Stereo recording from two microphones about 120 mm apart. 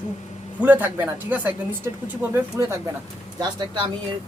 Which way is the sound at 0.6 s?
15° right (ahead or behind).